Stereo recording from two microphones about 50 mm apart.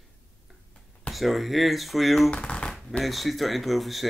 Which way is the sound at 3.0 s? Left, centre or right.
Centre.